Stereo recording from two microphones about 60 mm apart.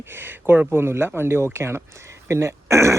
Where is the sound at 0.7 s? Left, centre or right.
Right.